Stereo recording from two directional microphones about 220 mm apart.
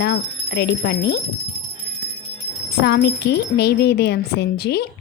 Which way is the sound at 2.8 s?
45° left (ahead or behind).